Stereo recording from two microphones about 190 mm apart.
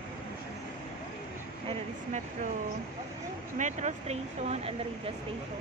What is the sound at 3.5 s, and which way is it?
Speech, 40° right (ahead or behind).